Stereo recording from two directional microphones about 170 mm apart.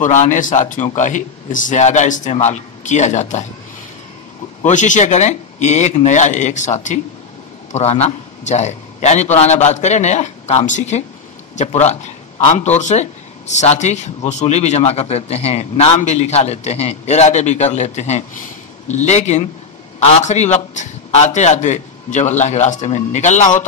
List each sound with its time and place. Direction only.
0.0 s a man's voice: 45° left (ahead or behind)
4.6 s a man's voice: 45° left (ahead or behind)